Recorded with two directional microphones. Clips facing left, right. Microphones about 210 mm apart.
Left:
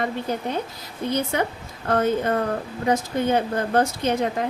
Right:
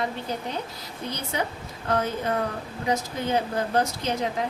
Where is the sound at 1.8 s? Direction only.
50° left (ahead or behind).